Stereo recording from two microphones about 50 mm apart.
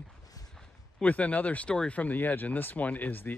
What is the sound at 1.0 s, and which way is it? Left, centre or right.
Speech, left.